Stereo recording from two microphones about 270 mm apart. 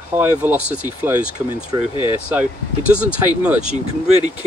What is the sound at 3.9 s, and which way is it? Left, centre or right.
Speech, right.